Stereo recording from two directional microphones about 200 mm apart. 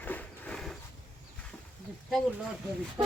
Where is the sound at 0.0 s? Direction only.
10° left (ahead or behind).